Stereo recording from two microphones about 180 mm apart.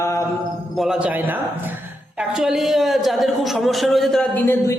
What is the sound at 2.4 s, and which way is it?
A man's voice, centre (ahead or behind).